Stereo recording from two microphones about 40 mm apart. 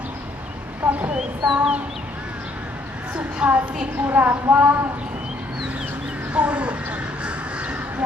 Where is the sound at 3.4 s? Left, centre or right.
Right.